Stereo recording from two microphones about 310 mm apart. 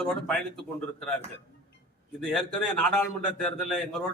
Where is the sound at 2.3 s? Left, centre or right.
Centre.